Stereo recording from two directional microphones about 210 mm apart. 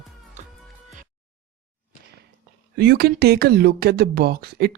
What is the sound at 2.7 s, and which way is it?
Speech, 50° right (ahead or behind).